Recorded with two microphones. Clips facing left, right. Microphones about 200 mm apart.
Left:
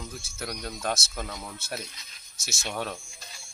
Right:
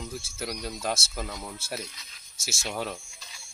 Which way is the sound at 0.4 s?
5° right (ahead or behind).